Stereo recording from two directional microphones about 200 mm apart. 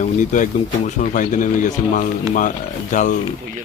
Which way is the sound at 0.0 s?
40° left (ahead or behind).